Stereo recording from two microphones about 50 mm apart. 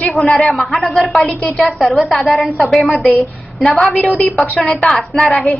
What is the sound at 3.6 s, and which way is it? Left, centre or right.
Speech, centre.